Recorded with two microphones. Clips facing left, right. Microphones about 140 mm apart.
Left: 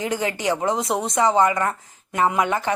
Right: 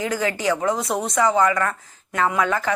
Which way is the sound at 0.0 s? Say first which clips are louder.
Right 1 dB; 20° left (ahead or behind).